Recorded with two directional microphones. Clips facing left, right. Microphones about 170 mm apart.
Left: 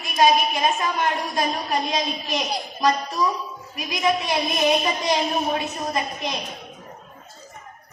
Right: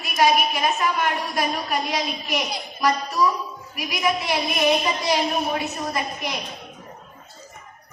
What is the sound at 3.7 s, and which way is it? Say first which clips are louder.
Speech: left 1 dB; 25° left (ahead or behind).